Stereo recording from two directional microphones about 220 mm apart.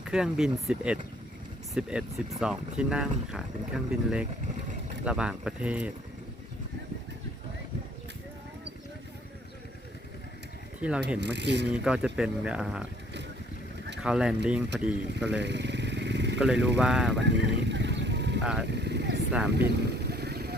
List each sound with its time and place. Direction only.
0.1 s speech: 5° right (ahead or behind)
10.8 s speech: 5° right (ahead or behind)
11.2 s speech: 50° right (ahead or behind)
11.7 s speech: 5° right (ahead or behind)
14.0 s speech: 5° right (ahead or behind)
15.1 s motorcycle: 50° right (ahead or behind)
16.6 s speech: 5° right (ahead or behind)
17.2 s vehicle: 55° right (ahead or behind)